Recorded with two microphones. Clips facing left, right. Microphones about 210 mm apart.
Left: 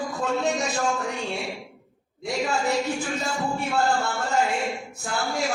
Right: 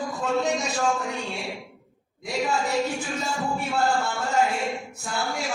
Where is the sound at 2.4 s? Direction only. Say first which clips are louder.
Even; centre (ahead or behind).